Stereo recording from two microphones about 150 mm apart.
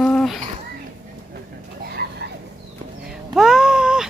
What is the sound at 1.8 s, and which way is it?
Vehicle, 90° right.